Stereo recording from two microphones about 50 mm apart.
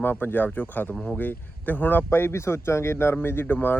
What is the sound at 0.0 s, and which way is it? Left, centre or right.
Speech, left.